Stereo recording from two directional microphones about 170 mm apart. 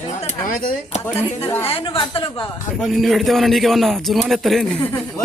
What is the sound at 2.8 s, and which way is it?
A man's voice, centre (ahead or behind).